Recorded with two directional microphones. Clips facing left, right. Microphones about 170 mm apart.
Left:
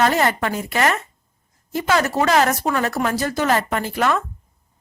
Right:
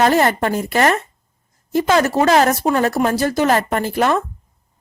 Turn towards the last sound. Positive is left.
turn(degrees=-40)  # may be behind; listen again after turning